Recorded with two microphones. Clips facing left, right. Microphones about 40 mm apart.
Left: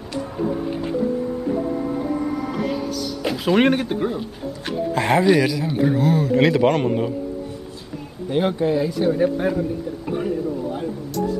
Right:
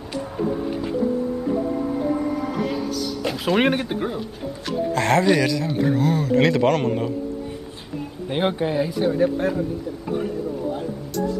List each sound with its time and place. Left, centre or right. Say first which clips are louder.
3.3 s speech: left 3 dB; centre
4.9 s speech: left 2 dB; centre
8.3 s speech: left 3 dB; right; by 9.2 s centre
9.2 s speech: left 1 dB; centre